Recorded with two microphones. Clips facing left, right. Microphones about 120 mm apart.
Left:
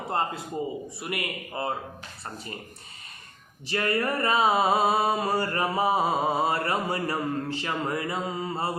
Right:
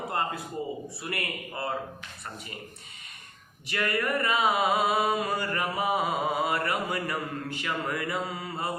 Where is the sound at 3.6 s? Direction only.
30° left (ahead or behind).